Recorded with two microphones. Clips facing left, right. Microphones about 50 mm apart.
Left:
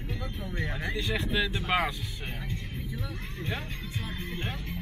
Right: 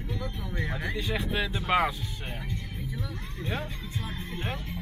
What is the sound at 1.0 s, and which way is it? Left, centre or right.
Speech, centre.